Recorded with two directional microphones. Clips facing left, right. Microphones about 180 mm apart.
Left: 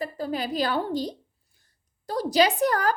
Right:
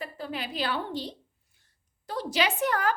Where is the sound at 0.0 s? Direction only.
40° left (ahead or behind).